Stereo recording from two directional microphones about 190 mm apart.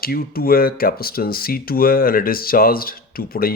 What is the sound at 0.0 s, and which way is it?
Speech, 50° left (ahead or behind).